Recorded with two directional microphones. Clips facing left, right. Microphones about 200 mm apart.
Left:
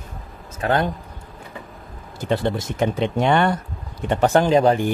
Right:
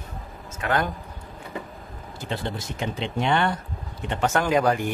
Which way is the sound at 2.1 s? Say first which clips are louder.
Left 9 dB; 50° left (ahead or behind).